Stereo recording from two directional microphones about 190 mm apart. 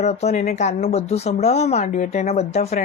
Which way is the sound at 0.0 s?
35° left (ahead or behind).